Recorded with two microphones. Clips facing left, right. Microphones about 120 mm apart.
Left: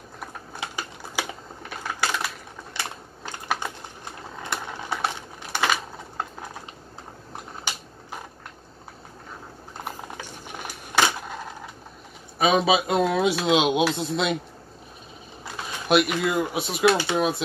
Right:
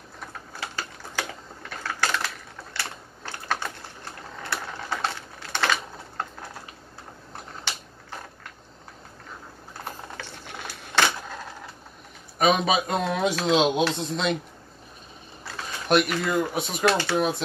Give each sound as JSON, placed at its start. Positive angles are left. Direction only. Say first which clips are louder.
{"t": 0.6, "sound": "typing", "louder": "left 1 dB", "side_deg": 15}
{"t": 1.8, "sound": "typewriter", "louder": "even", "side_deg": 15}
{"t": 2.7, "sound": "typing", "louder": "left 2 dB", "side_deg": 15}
{"t": 9.8, "sound": "a sound", "louder": "left 1 dB", "side_deg": 15}
{"t": 12.4, "sound": "speech", "louder": "left 1 dB", "side_deg": 5}
{"t": 15.4, "sound": "speech", "louder": "left 1 dB", "side_deg": 5}